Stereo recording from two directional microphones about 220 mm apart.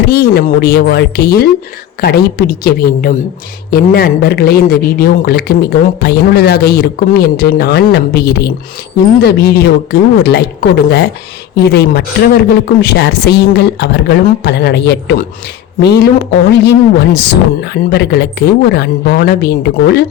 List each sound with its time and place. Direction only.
0.1 s speech: 45° left (ahead or behind)